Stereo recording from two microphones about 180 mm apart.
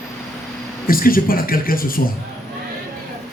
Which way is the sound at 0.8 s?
55° left (ahead or behind).